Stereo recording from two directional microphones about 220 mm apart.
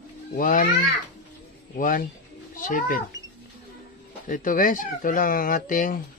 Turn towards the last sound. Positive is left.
turn(degrees=40)  # may be behind; listen again after turning